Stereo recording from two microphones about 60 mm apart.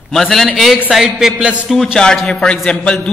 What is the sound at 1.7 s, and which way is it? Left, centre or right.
Speech, centre.